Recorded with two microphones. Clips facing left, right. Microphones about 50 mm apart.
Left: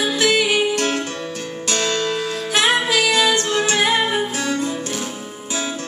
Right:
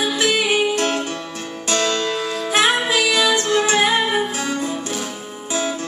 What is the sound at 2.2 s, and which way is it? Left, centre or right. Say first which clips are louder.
Music: right 1 dB; centre.